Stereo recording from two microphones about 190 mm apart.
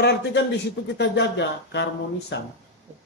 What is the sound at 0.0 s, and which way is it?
Speech, 60° left (ahead or behind).